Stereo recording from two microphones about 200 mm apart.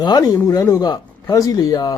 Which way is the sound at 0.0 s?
20° left (ahead or behind).